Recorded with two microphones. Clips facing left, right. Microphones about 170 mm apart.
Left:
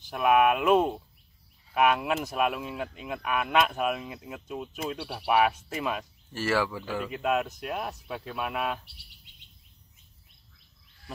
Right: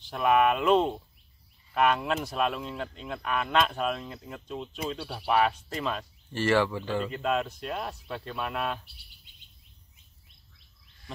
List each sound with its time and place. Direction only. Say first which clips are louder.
0.1 s speech: left 1 dB; 5° left (ahead or behind)
8.8 s speech: left 2 dB; 75° left (ahead or behind)
11.1 s a sound: left 1 dB; 5° left (ahead or behind)